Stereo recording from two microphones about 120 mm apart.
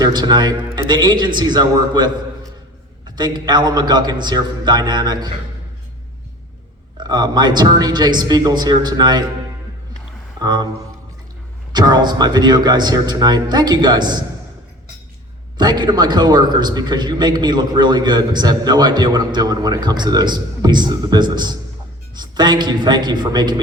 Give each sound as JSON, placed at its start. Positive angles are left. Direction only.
{"t": 0.0, "sound": "a man's voice", "side_deg": -35}
{"t": 3.2, "sound": "a man's voice", "side_deg": -35}
{"t": 7.1, "sound": "a man's voice", "side_deg": -35}
{"t": 10.4, "sound": "a man's voice", "side_deg": -35}
{"t": 11.7, "sound": "a man's voice", "side_deg": -35}
{"t": 15.5, "sound": "a man's voice", "side_deg": -35}